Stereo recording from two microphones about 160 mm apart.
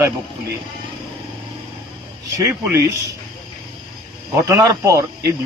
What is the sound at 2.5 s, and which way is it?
Speech, 15° right (ahead or behind).